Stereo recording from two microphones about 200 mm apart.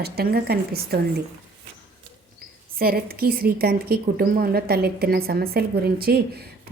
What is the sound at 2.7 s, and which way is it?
Speech, 50° right (ahead or behind).